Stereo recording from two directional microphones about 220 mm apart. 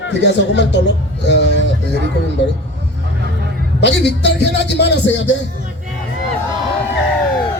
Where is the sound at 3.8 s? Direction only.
50° left (ahead or behind).